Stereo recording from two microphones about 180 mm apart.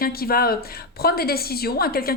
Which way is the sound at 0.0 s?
55° left (ahead or behind).